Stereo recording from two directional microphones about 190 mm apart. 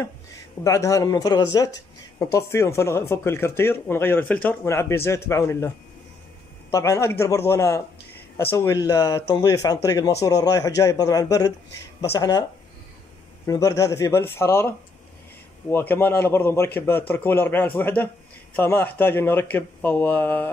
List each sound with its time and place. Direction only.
0.7 s speech: 15° left (ahead or behind)
6.7 s a man's voice: 15° left (ahead or behind)
13.5 s speech: 15° left (ahead or behind)
15.7 s speech: 10° left (ahead or behind)